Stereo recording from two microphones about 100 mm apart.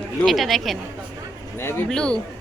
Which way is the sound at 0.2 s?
Centre (ahead or behind).